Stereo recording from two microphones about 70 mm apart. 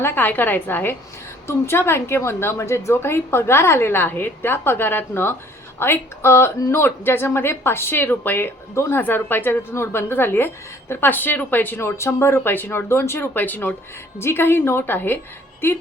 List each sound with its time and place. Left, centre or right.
0.0 s a woman's voice: left